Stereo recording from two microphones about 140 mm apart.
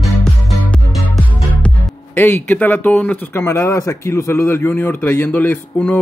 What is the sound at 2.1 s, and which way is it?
Speech, 15° left (ahead or behind).